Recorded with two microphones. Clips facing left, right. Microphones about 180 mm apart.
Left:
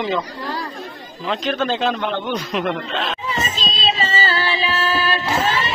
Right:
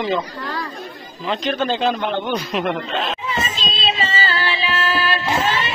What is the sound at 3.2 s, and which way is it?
Music, 35° left (ahead or behind).